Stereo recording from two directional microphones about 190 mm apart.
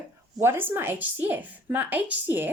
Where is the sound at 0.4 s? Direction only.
10° right (ahead or behind).